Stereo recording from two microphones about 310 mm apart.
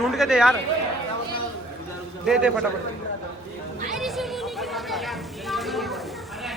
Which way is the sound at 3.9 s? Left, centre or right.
Centre.